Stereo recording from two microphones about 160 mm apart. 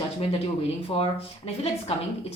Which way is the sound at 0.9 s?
30° left (ahead or behind).